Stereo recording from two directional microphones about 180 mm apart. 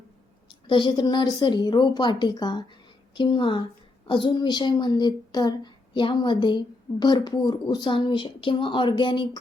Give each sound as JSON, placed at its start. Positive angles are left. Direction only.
{"t": 0.7, "sound": "a woman's voice", "side_deg": 25}